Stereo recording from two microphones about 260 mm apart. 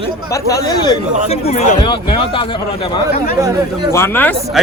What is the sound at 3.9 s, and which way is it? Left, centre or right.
Speech, centre.